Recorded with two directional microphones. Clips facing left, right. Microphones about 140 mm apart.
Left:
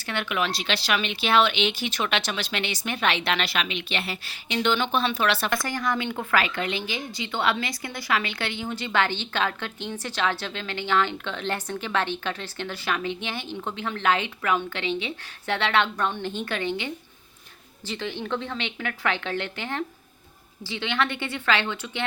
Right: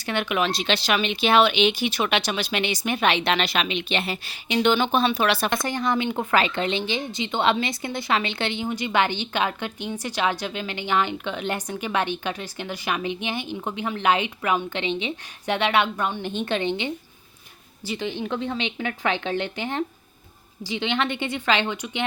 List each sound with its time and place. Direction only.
0.0 s speech: 20° right (ahead or behind)
16.2 s a woman's voice: 20° right (ahead or behind)